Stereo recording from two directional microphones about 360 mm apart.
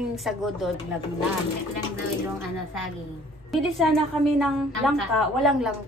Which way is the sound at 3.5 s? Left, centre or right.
Centre.